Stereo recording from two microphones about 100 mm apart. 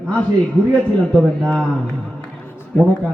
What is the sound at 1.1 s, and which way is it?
Speech, 10° left (ahead or behind).